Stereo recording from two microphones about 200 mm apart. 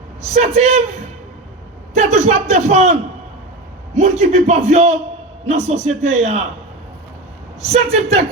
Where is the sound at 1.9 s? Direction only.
35° right (ahead or behind).